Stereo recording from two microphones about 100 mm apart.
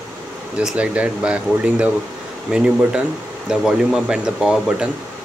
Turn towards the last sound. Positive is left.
turn(degrees=-10)  # may be behind; listen again after turning